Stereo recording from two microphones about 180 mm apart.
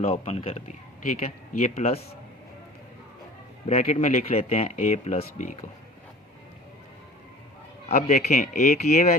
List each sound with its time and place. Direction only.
0.0 s speech: 35° left (ahead or behind)
3.7 s speech: 35° left (ahead or behind)
7.9 s speech: 40° left (ahead or behind)